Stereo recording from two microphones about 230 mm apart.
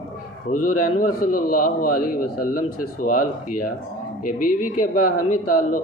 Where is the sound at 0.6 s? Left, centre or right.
Left.